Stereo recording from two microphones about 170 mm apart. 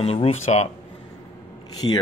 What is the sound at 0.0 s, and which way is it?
Speech, 35° left (ahead or behind).